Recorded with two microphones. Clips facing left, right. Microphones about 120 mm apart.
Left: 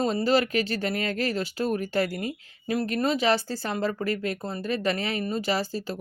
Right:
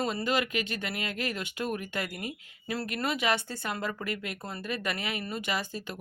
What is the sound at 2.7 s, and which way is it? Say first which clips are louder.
Speech: left 7 dB; 20° left (ahead or behind).